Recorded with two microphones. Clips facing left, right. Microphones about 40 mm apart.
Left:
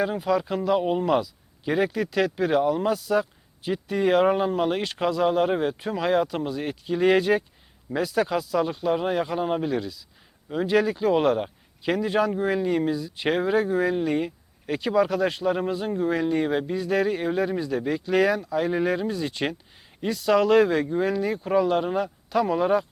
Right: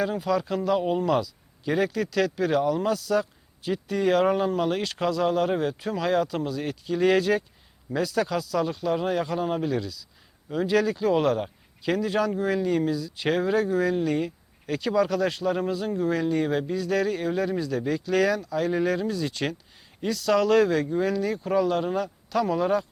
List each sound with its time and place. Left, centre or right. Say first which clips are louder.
0.0 s speech: left 1 dB; centre